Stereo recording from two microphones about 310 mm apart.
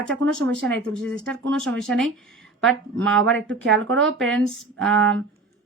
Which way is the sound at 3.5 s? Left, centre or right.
Right.